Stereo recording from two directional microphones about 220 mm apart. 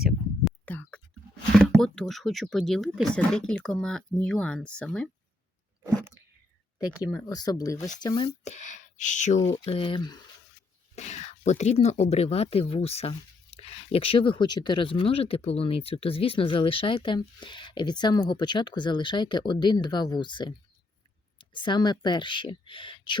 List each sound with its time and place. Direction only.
0.0 s whispering: 5° left (ahead or behind)
1.5 s speech: centre (ahead or behind)
7.3 s speech: 15° left (ahead or behind)
8.4 s speech: 30° left (ahead or behind)
10.9 s speech: 30° left (ahead or behind)